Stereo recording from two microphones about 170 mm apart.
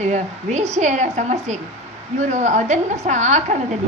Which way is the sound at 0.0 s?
45° right (ahead or behind).